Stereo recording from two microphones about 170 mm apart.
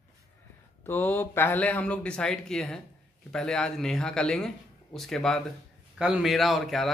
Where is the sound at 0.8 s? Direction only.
15° left (ahead or behind).